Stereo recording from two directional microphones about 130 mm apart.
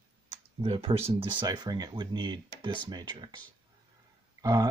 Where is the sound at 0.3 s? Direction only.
50° right (ahead or behind).